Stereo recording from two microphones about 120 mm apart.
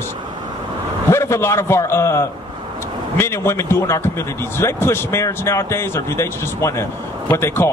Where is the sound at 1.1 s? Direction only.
20° left (ahead or behind).